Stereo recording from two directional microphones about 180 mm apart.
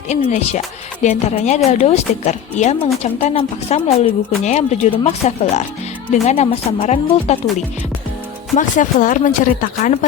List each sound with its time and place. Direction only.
0.1 s a woman's voice: 40° left (ahead or behind)
8.5 s speech: 45° left (ahead or behind)